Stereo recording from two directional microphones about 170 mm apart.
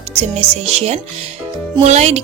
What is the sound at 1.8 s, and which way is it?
Speech, 40° right (ahead or behind).